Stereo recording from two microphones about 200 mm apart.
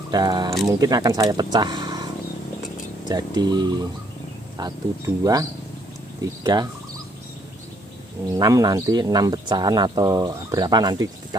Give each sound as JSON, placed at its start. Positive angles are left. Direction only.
{"t": 0.1, "sound": "speech", "side_deg": -20}
{"t": 3.1, "sound": "speech", "side_deg": -20}
{"t": 8.3, "sound": "speech", "side_deg": -15}